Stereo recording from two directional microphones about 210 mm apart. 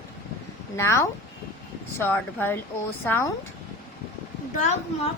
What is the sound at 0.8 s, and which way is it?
Speech, 15° left (ahead or behind).